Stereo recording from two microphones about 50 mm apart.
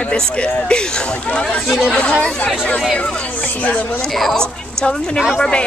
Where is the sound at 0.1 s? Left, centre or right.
Centre.